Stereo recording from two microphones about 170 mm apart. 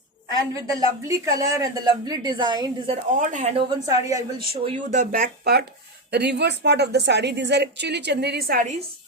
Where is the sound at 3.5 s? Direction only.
25° right (ahead or behind).